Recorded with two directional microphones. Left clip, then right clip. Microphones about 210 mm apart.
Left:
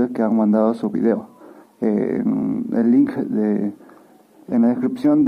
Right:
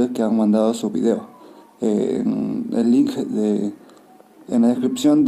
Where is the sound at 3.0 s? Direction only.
35° left (ahead or behind).